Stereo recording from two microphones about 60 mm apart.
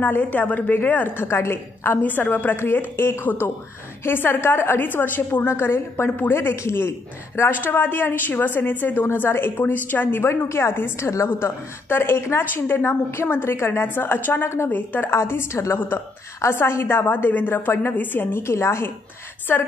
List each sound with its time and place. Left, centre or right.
0.0 s a woman's voice: left
6.5 s a woman's voice: left
14.7 s a woman's voice: left
18.4 s a woman's voice: left